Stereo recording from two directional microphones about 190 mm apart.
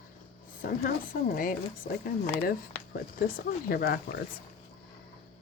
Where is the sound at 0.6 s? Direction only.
50° left (ahead or behind).